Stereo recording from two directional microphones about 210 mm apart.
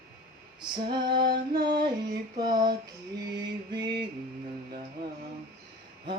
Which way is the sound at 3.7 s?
20° right (ahead or behind).